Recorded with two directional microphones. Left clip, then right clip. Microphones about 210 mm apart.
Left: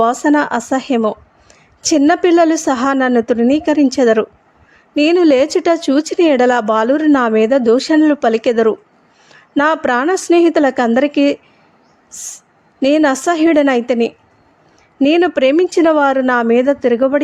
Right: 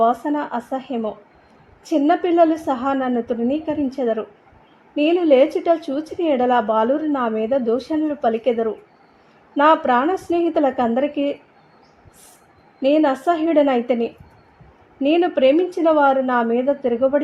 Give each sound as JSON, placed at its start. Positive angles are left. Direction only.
{"t": 0.0, "sound": "a woman's voice", "side_deg": 30}
{"t": 12.8, "sound": "a woman's voice", "side_deg": 30}